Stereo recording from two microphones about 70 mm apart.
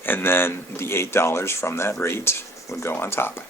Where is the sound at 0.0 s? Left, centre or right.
Left.